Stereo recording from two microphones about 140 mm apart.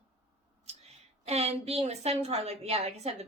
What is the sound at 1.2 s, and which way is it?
Speech, 50° right (ahead or behind).